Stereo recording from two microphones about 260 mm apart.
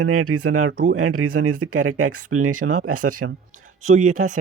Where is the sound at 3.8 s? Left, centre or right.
Right.